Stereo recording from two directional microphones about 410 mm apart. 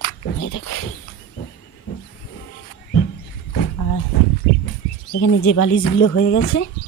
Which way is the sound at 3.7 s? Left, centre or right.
Left.